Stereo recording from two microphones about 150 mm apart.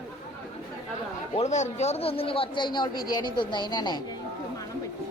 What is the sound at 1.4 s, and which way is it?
A man's voice, 50° left (ahead or behind).